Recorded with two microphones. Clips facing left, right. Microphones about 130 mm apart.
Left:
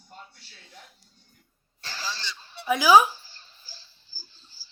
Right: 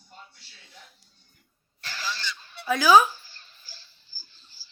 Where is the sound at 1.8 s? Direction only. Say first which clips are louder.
Right 1 dB; 35° left (ahead or behind).